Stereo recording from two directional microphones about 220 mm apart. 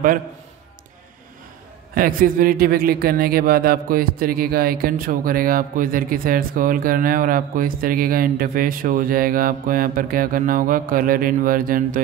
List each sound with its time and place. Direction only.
2.0 s a man's voice: 40° right (ahead or behind)